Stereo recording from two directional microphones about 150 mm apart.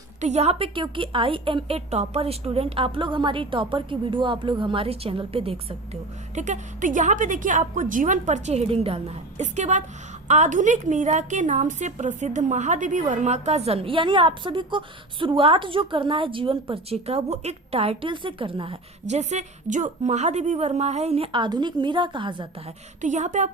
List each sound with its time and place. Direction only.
0.2 s a woman's voice: 50° right (ahead or behind)
19.0 s a woman's voice: 50° right (ahead or behind); by 22.4 s 30° right (ahead or behind)
23.0 s a woman's voice: 55° right (ahead or behind)